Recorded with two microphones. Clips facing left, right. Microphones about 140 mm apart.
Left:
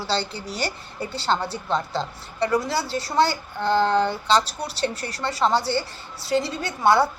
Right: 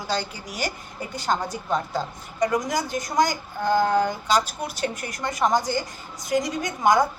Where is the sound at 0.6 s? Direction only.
35° left (ahead or behind).